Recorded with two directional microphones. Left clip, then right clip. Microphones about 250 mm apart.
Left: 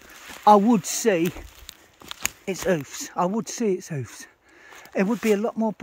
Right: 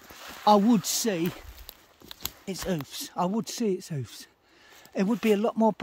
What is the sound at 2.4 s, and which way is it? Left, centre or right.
Speech, centre.